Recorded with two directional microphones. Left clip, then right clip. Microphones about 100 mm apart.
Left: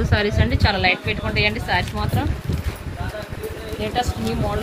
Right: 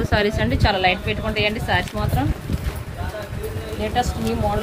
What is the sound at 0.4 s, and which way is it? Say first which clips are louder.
Speech: right 1 dB; 15° right (ahead or behind).